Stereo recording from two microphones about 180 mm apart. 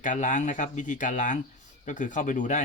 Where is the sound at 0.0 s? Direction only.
45° left (ahead or behind).